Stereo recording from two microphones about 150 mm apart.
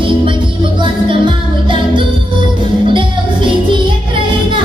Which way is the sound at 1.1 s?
35° right (ahead or behind).